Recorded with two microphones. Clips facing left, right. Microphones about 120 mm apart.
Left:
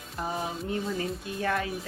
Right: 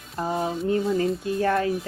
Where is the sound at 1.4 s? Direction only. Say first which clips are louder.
Right 6 dB; 40° right (ahead or behind).